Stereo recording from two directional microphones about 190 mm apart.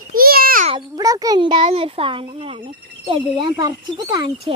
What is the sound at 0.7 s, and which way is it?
A child's voice, 20° right (ahead or behind).